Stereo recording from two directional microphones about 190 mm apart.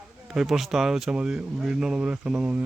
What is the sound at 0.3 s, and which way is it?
Speech, centre (ahead or behind).